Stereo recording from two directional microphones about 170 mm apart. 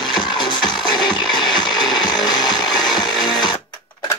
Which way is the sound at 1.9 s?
25° left (ahead or behind).